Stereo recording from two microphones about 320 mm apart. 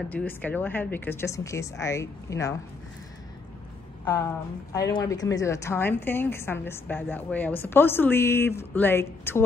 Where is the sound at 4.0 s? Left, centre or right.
Centre.